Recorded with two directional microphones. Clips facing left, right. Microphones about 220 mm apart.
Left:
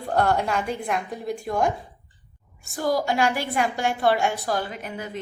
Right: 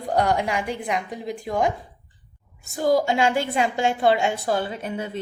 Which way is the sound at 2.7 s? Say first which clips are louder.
Right 3 dB; 20° right (ahead or behind).